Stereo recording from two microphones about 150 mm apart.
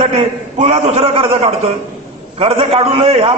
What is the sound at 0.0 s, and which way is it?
A man's voice, 45° right (ahead or behind).